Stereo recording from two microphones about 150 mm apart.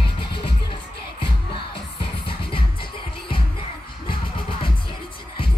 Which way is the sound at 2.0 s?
35° left (ahead or behind).